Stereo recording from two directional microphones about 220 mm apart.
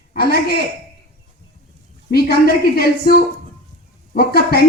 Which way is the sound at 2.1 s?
45° left (ahead or behind).